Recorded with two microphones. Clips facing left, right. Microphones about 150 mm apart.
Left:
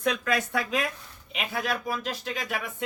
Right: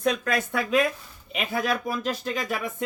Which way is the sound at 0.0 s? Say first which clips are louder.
Right 2 dB; 45° right (ahead or behind).